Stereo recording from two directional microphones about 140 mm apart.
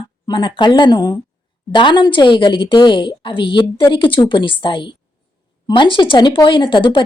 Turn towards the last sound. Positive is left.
turn(degrees=35)  # may be behind; listen again after turning